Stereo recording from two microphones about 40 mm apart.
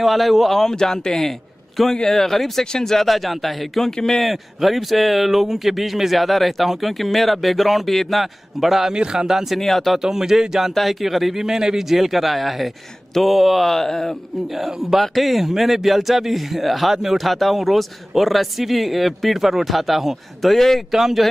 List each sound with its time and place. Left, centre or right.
0.0 s speech: centre
0.6 s speech: centre
3.1 s speech: centre
3.9 s speech: centre
4.2 s speech: centre
8.8 s a man's voice: centre
9.6 s speech: centre
9.9 s a man's voice: centre
10.7 s speech: centre
14.7 s a man's voice: centre
17.2 s speech: centre
20.5 s speech: centre
20.9 s a man's voice: centre